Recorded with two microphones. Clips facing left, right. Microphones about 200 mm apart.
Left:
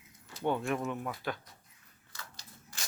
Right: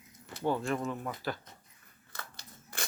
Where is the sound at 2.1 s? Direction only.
60° right (ahead or behind).